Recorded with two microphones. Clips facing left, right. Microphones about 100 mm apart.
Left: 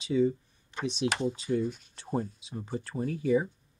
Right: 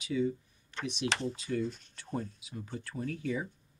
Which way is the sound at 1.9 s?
25° left (ahead or behind).